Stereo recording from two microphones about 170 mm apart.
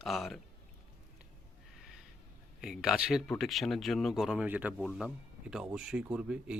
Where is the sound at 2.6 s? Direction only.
5° right (ahead or behind).